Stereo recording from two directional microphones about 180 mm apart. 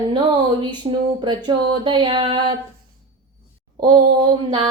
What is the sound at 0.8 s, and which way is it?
Female singing, 30° right (ahead or behind).